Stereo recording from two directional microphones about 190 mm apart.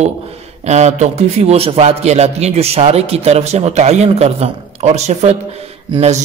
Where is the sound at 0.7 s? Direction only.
35° right (ahead or behind).